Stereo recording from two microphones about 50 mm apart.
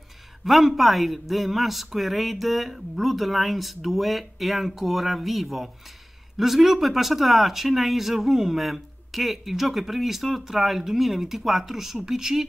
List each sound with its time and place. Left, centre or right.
0.5 s speech: centre